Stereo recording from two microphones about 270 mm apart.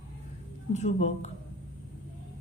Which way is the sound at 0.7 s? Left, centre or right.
Left.